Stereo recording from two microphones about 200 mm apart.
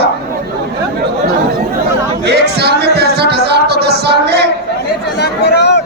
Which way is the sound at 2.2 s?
55° right (ahead or behind).